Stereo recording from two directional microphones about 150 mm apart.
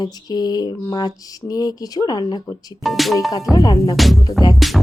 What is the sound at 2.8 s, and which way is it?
Speech, centre (ahead or behind).